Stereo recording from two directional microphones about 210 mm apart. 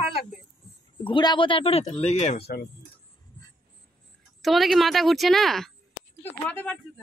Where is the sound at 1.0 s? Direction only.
20° left (ahead or behind).